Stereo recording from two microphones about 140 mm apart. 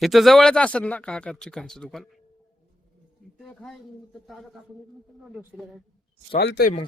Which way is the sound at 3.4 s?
5° left (ahead or behind).